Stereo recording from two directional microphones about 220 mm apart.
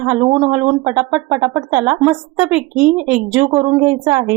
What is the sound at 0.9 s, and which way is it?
Speech, 10° right (ahead or behind).